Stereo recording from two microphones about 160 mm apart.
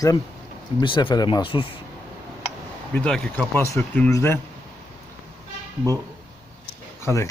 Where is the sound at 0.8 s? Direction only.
30° left (ahead or behind).